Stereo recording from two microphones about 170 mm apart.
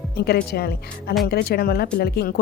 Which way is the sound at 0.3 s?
65° left (ahead or behind).